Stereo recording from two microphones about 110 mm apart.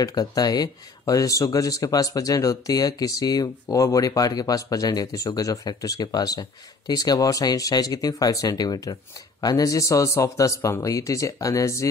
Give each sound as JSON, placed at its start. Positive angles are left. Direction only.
{"t": 0.0, "sound": "a man's voice", "side_deg": 35}